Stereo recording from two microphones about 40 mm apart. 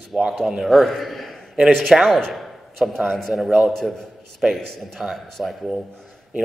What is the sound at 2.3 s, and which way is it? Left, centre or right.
Speech, centre.